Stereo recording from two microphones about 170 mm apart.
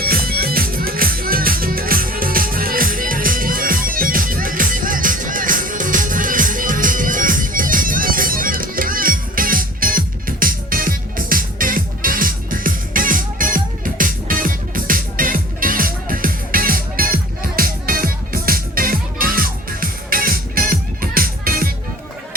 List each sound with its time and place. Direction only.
0.0 s music: 60° right (ahead or behind)